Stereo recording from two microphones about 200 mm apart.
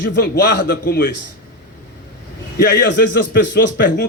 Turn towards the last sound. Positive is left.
turn(degrees=55)  # may be behind; listen again after turning